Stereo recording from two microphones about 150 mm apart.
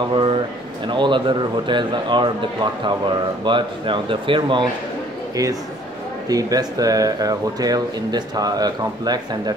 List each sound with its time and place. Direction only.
0.1 s speech: 35° right (ahead or behind)
5.3 s a man's voice: 25° right (ahead or behind)